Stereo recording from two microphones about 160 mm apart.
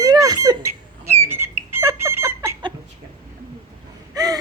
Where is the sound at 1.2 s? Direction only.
15° right (ahead or behind).